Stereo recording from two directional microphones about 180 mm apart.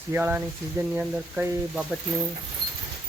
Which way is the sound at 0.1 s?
10° right (ahead or behind).